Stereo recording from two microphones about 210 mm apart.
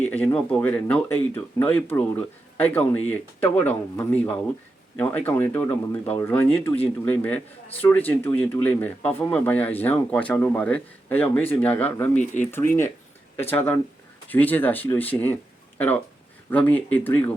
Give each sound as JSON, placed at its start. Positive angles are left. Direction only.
{"t": 0.0, "sound": "speech", "side_deg": 10}
{"t": 12.2, "sound": "speech", "side_deg": 35}
{"t": 13.3, "sound": "speech", "side_deg": 10}
{"t": 16.5, "sound": "speech", "side_deg": 10}